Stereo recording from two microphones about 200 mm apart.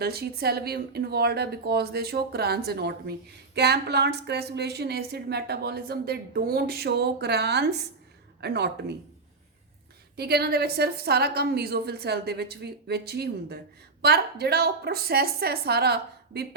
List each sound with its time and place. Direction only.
0.0 s speech: 50° right (ahead or behind)
10.2 s speech: 55° right (ahead or behind)